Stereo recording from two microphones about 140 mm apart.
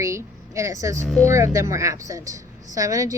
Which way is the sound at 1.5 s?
20° right (ahead or behind).